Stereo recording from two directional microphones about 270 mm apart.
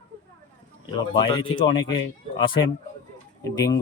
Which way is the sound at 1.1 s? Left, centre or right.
Centre.